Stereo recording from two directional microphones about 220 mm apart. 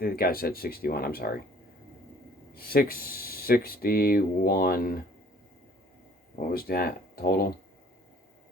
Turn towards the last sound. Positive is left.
turn(degrees=45)  # may be behind; listen again after turning